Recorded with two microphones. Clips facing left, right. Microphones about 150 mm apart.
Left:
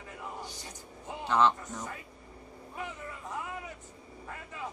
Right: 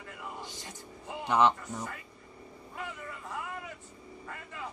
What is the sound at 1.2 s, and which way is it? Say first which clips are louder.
Speech: right 1 dB; 15° right (ahead or behind).